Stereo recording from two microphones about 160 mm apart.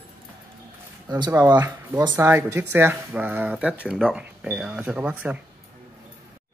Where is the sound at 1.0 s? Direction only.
25° right (ahead or behind); by 5.4 s 10° right (ahead or behind).